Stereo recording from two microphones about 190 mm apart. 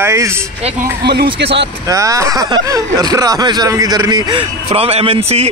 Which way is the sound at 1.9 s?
15° right (ahead or behind).